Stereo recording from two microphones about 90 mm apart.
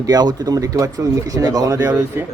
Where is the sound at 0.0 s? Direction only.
45° right (ahead or behind).